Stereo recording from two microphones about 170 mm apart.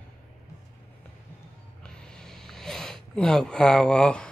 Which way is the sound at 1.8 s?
5° left (ahead or behind).